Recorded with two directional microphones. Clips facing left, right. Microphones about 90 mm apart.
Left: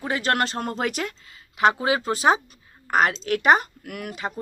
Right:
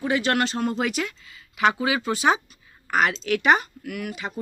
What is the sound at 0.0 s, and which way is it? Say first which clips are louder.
Speech: right 1 dB; 40° left (ahead or behind).